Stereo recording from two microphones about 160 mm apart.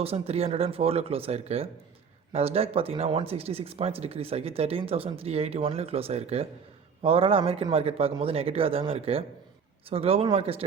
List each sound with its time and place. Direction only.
0.0 s speech: 40° right (ahead or behind)